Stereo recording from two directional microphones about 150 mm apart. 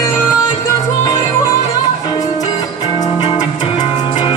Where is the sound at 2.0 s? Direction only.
25° left (ahead or behind).